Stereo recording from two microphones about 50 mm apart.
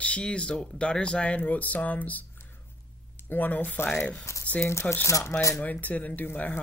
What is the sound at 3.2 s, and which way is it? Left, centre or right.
Speech, left.